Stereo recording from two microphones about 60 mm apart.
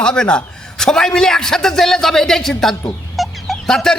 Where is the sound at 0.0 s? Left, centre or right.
Centre.